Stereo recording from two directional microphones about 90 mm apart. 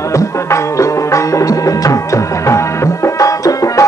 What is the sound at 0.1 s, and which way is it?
Music, 35° left (ahead or behind).